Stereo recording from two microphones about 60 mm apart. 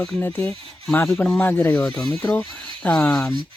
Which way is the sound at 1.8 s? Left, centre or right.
Centre.